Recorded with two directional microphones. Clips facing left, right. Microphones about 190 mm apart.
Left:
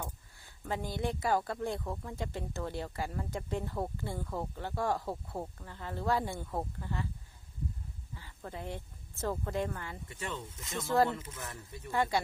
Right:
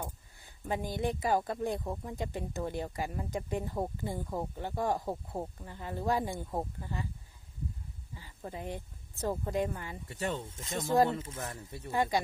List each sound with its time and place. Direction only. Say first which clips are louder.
0.0 s speech: right 1 dB; 20° right (ahead or behind)
8.1 s speech: right 2 dB; 15° right (ahead or behind)
10.1 s speech: right 7 dB; 40° right (ahead or behind)
10.8 s speech: right 2 dB; 15° right (ahead or behind)
11.1 s speech: right 4 dB; 30° right (ahead or behind)
11.9 s speech: right 1 dB; 20° right (ahead or behind)